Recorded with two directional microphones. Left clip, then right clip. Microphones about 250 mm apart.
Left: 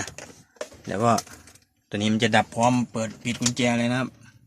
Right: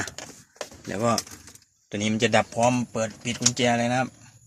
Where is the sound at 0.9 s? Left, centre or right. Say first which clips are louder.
Left 3 dB; centre.